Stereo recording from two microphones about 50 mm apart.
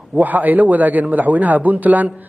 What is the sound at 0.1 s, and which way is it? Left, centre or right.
A man's voice, right.